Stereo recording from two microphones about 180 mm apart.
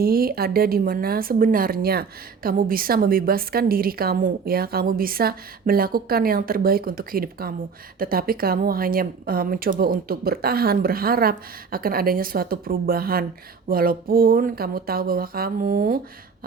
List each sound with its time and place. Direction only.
0.0 s a woman's voice: 55° right (ahead or behind)